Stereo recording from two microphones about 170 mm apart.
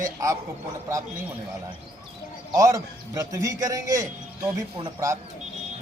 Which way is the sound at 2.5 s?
20° right (ahead or behind).